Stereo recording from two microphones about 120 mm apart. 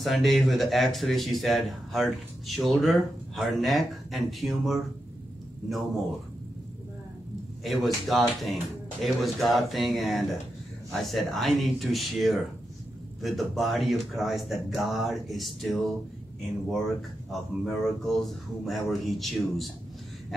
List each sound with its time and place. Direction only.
0.0 s speech: centre (ahead or behind)
7.6 s speech: centre (ahead or behind)
17.3 s speech: centre (ahead or behind)